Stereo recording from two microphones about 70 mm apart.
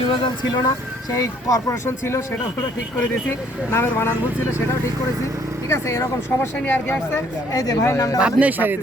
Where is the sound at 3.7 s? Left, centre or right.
Left.